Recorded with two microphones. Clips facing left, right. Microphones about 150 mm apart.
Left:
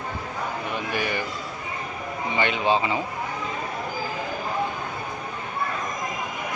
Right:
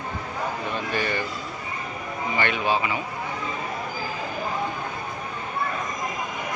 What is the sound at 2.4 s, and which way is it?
Speech, 20° left (ahead or behind).